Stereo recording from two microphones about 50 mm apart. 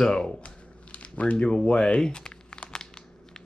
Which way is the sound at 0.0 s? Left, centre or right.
Centre.